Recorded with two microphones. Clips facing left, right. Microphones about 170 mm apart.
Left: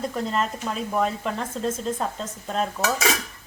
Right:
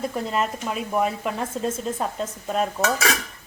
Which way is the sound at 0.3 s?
10° right (ahead or behind).